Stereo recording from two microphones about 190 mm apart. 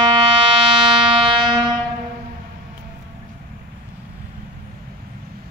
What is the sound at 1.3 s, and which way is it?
Music, 25° right (ahead or behind).